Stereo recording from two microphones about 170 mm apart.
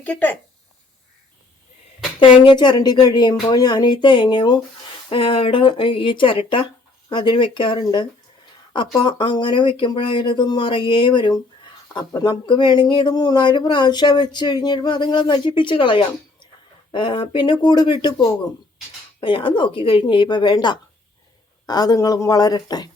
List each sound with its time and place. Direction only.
0.0 s speech: 10° left (ahead or behind)
2.4 s speech: 30° left (ahead or behind)